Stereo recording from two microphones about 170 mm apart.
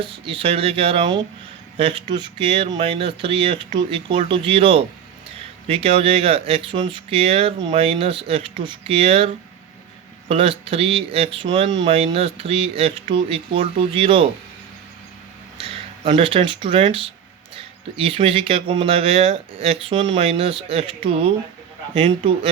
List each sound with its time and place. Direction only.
0.0 s speech: 30° right (ahead or behind)
15.5 s speech: 35° right (ahead or behind)